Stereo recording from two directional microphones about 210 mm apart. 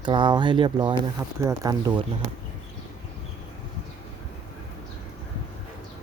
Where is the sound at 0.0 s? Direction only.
20° right (ahead or behind).